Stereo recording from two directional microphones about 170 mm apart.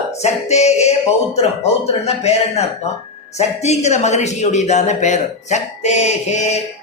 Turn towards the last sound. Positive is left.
turn(degrees=40)  # may be behind; listen again after turning